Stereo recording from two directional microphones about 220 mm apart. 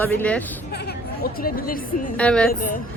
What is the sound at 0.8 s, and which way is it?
Speech, 45° left (ahead or behind).